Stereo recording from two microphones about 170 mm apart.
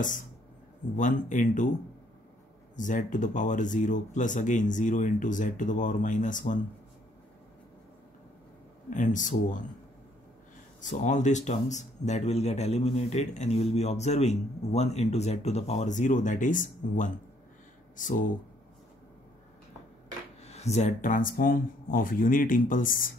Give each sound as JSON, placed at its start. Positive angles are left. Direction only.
{"t": 0.9, "sound": "speech", "side_deg": 50}
{"t": 2.7, "sound": "speech", "side_deg": 50}
{"t": 8.9, "sound": "speech", "side_deg": 50}
{"t": 10.8, "sound": "speech", "side_deg": 45}
{"t": 20.4, "sound": "speech", "side_deg": 40}